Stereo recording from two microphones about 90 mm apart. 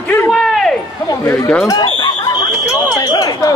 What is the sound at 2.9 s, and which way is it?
Wind chime, 45° left (ahead or behind).